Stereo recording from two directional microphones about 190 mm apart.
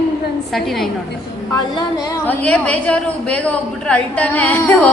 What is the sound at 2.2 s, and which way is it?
A woman's voice, 5° left (ahead or behind).